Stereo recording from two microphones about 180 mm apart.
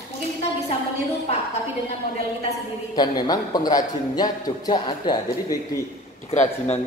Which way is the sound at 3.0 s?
25° left (ahead or behind).